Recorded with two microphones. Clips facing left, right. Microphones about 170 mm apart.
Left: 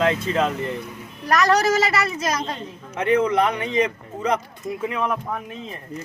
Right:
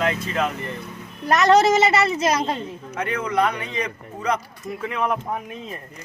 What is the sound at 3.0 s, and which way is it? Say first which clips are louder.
A man's voice: left 4 dB; 25° left (ahead or behind).